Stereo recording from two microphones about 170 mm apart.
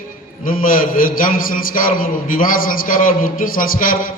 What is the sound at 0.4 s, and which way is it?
A man's voice, 55° left (ahead or behind).